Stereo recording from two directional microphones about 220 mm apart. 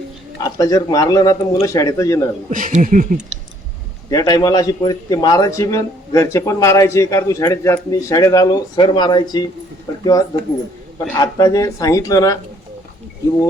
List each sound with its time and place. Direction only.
0.4 s a man's voice: 15° left (ahead or behind)
2.5 s speech: 35° right (ahead or behind)
4.1 s a man's voice: 20° left (ahead or behind)